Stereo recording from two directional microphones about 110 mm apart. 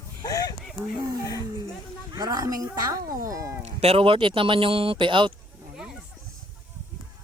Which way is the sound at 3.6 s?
70° right (ahead or behind).